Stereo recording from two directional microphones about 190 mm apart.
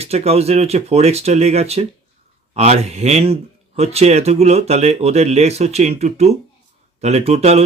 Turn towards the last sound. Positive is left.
turn(degrees=-35)  # may be behind; listen again after turning